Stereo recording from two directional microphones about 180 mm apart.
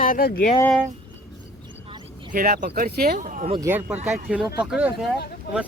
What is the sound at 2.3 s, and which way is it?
Speech, 50° right (ahead or behind).